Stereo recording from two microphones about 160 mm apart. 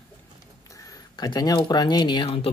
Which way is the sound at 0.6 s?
20° left (ahead or behind).